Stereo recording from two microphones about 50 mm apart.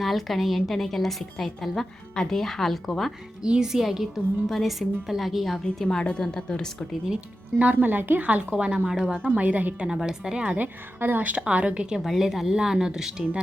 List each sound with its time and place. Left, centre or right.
0.0 s a woman's voice: centre
3.4 s a woman's voice: centre
5.6 s speech: centre
7.6 s a woman's voice: right; by 9.1 s centre
9.3 s a woman's voice: right
9.8 s speech: centre
10.4 s a woman's voice: right
12.0 s a woman's voice: centre